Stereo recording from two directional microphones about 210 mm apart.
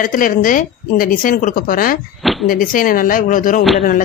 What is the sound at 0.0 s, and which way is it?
A woman's voice, 40° left (ahead or behind).